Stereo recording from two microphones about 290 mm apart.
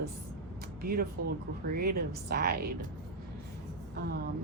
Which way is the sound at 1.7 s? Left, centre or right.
Right.